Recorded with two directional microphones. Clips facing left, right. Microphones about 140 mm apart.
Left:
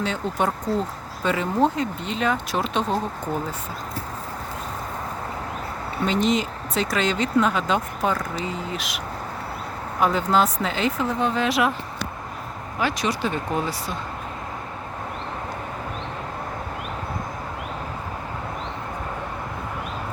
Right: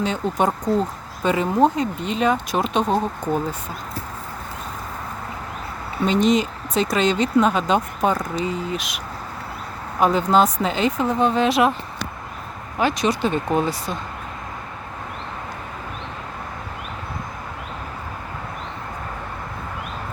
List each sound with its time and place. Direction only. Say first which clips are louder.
0.0 s speech: right 3 dB; 15° right (ahead or behind)
6.1 s speech: right 4 dB; 20° right (ahead or behind)
10.0 s speech: right 3 dB; 20° right (ahead or behind)
12.8 s speech: right 4 dB; 20° right (ahead or behind)